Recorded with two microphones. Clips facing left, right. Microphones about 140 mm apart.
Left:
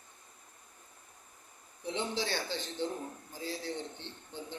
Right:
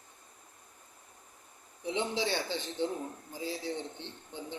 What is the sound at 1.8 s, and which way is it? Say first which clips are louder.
A man's voice: right 3 dB; 20° right (ahead or behind).